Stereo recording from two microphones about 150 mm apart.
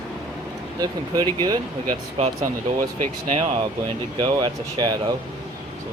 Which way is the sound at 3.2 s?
40° right (ahead or behind).